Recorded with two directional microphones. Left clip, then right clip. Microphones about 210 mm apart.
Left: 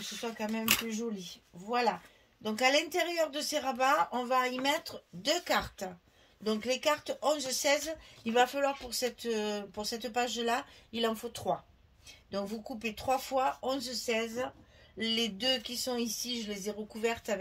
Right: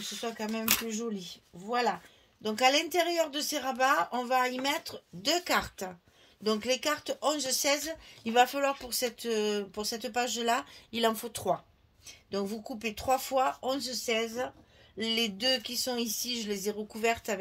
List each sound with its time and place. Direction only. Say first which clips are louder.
0.2 s speech: right 1 dB; 35° right (ahead or behind)